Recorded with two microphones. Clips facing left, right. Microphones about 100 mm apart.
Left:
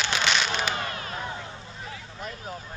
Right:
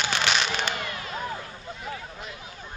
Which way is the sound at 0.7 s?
30° left (ahead or behind).